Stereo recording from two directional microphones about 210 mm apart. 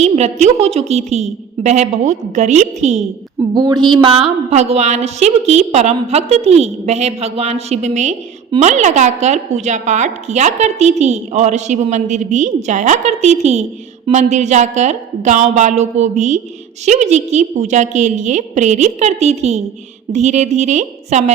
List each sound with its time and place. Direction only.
0.0 s a woman's voice: 30° right (ahead or behind)
3.5 s a sound: 20° right (ahead or behind)
3.8 s a woman's voice: 25° right (ahead or behind)